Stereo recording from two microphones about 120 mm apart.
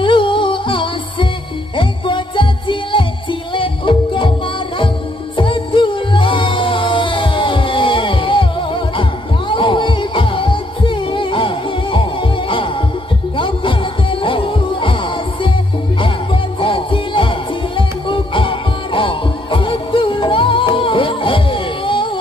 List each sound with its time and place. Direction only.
0.0 s music: 45° left (ahead or behind)
5.3 s music: 45° left (ahead or behind)
14.2 s music: 45° left (ahead or behind)
16.5 s music: 45° left (ahead or behind)